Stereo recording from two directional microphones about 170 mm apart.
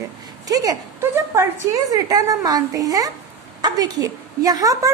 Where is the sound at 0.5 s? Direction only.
20° right (ahead or behind).